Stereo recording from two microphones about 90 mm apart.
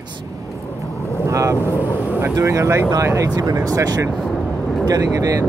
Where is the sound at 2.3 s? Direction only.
35° right (ahead or behind).